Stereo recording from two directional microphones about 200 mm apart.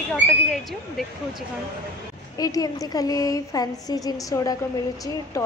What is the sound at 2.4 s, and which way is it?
A woman's voice, 20° left (ahead or behind).